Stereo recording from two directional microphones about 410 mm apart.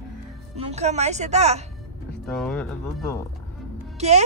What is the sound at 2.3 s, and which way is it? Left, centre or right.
Speech, centre.